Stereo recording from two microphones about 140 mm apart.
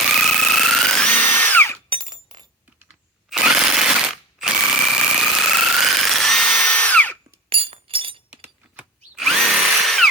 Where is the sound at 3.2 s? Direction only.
5° right (ahead or behind).